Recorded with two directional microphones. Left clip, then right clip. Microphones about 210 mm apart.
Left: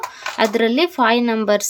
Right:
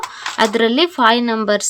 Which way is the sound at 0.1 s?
10° right (ahead or behind).